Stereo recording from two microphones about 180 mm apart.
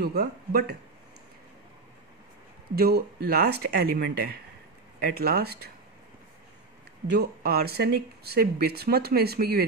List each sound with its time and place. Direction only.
0.0 s speech: 60° right (ahead or behind)
2.7 s speech: 60° right (ahead or behind)
7.1 s speech: 60° right (ahead or behind)